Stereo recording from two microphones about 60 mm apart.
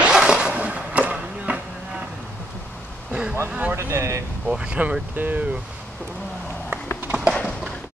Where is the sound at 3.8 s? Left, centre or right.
Right.